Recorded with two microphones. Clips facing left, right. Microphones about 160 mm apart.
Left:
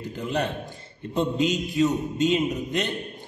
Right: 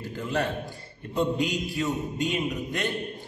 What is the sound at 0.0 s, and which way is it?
A man's voice, 20° left (ahead or behind).